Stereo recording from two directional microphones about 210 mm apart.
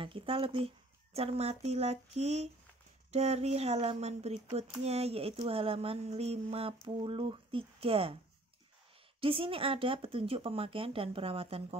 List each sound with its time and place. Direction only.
0.0 s speech: 25° right (ahead or behind)
9.2 s speech: 25° right (ahead or behind)